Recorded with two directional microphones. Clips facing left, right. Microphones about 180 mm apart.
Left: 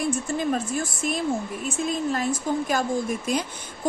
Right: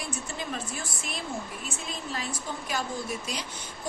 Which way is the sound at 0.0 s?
50° left (ahead or behind).